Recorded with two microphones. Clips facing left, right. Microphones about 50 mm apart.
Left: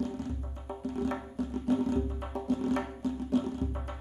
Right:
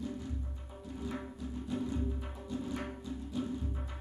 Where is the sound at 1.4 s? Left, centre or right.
Left.